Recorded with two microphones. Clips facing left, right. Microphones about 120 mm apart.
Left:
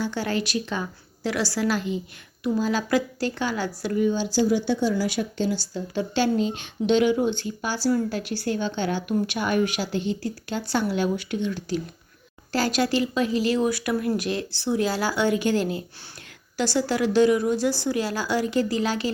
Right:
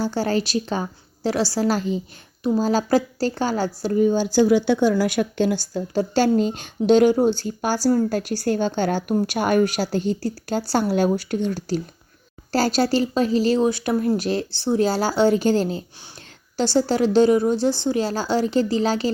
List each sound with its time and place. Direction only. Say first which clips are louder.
0.0 s a woman's voice: right 4 dB; 35° right (ahead or behind)